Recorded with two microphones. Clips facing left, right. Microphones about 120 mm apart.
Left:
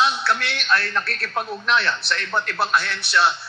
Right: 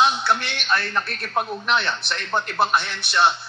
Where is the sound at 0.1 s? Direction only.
25° right (ahead or behind).